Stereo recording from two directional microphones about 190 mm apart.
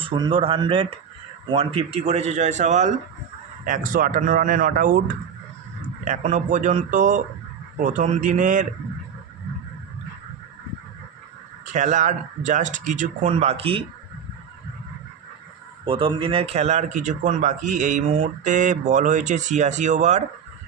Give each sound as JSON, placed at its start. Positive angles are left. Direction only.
{"t": 0.0, "sound": "speech", "side_deg": -25}
{"t": 6.1, "sound": "speech", "side_deg": -40}
{"t": 11.7, "sound": "speech", "side_deg": -40}
{"t": 15.8, "sound": "speech", "side_deg": -25}